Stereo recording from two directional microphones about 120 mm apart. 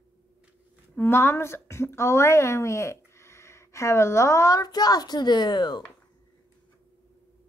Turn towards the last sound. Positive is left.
turn(degrees=40)  # may be behind; listen again after turning